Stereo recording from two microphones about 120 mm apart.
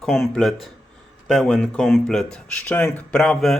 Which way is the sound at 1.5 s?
15° left (ahead or behind).